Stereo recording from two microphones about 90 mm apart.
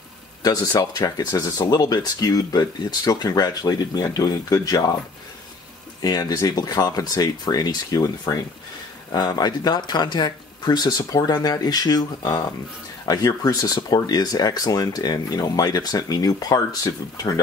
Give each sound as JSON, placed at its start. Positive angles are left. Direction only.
{"t": 0.4, "sound": "speech", "side_deg": 45}
{"t": 6.0, "sound": "speech", "side_deg": 45}